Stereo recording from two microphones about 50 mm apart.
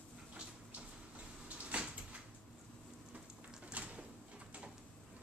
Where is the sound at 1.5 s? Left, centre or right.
Right.